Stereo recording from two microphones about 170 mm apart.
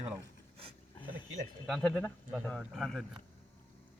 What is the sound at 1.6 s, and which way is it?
A man's voice, centre (ahead or behind).